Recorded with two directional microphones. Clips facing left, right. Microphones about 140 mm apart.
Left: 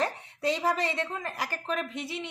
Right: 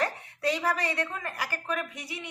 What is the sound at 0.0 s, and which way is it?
A woman's voice, 20° left (ahead or behind).